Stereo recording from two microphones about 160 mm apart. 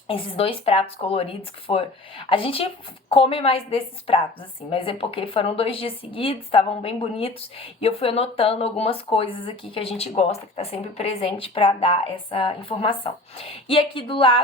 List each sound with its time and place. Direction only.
0.1 s a woman's voice: 35° left (ahead or behind)